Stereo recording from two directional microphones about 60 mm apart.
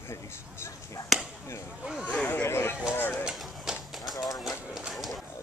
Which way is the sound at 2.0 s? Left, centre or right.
Left.